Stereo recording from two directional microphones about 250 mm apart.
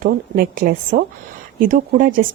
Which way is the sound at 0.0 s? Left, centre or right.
Right.